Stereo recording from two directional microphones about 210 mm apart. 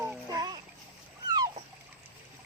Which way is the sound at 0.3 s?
20° right (ahead or behind).